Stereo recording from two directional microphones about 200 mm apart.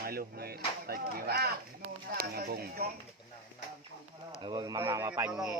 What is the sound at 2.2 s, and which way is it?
Speech, 50° right (ahead or behind).